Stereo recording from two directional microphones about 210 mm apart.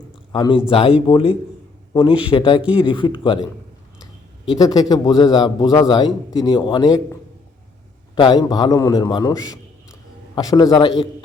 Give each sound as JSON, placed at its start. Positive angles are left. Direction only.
{"t": 0.3, "sound": "a man's voice", "side_deg": 20}
{"t": 4.5, "sound": "a man's voice", "side_deg": 20}
{"t": 8.1, "sound": "a man's voice", "side_deg": 20}